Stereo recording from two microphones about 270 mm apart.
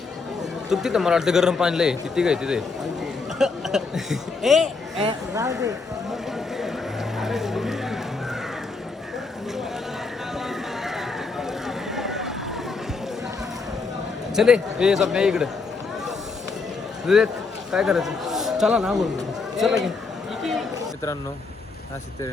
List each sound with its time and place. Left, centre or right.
0.7 s a man's voice: centre
5.0 s speech: centre
7.2 s music: centre
10.3 s a sound: centre
14.3 s a man's voice: centre
17.1 s a man's voice: centre